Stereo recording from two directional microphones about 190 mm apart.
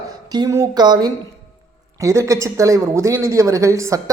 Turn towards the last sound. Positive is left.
turn(degrees=-15)  # may be behind; listen again after turning